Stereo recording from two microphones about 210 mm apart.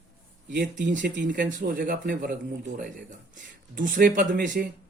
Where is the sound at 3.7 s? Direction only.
40° right (ahead or behind).